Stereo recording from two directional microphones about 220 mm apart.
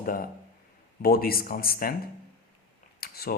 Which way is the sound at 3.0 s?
45° left (ahead or behind).